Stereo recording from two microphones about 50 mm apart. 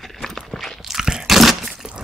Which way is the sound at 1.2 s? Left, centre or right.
Centre.